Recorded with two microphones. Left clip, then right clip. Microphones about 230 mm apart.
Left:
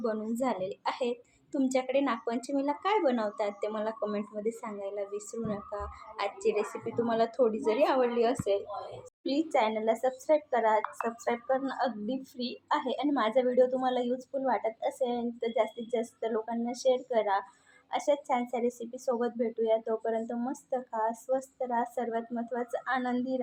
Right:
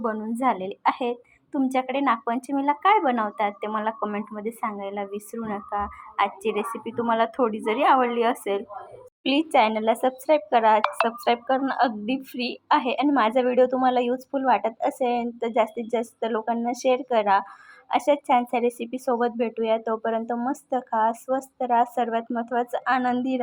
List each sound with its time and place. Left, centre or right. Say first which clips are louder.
0.0 s speech: right 7 dB; right
9.3 s a woman's voice: right 7 dB; right
9.6 s speech: right 7 dB; right